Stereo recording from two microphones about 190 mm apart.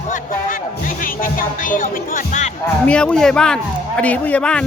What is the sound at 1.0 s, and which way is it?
Speech, 45° left (ahead or behind).